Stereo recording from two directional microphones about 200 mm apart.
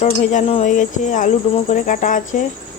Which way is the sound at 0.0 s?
40° left (ahead or behind).